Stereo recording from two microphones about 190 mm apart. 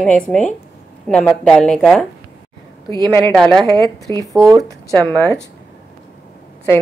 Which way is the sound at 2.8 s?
25° right (ahead or behind).